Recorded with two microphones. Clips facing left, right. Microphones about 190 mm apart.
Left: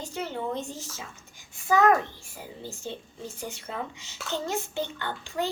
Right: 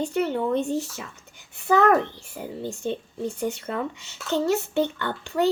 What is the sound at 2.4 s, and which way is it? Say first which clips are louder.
A child's voice: right 8 dB; 60° right (ahead or behind).